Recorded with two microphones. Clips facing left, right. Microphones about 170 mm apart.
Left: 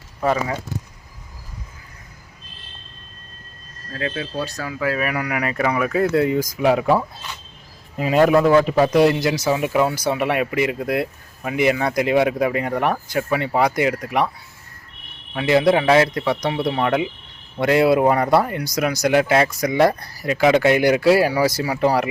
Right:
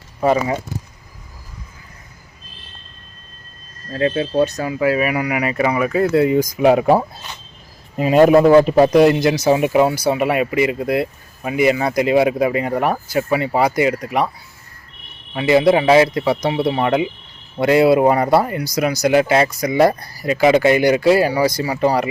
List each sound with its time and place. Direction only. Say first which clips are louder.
0.2 s speech: right 4 dB; 15° right (ahead or behind)
3.9 s a man's voice: right 9 dB; 30° right (ahead or behind); by 14.3 s centre (ahead or behind)
15.3 s a man's voice: right 3 dB; 5° right (ahead or behind)